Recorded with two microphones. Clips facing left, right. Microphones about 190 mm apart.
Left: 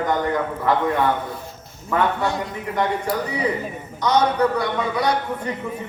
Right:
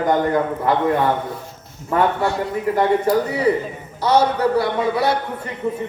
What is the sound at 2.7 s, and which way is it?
Speech, 30° right (ahead or behind).